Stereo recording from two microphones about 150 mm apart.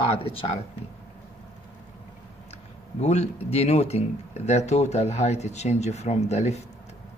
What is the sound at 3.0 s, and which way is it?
Speech, 45° left (ahead or behind).